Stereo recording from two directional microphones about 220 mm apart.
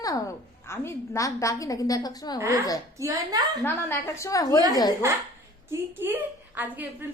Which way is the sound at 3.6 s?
10° left (ahead or behind).